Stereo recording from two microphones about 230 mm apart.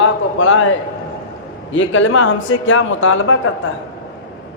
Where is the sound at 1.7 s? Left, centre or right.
Left.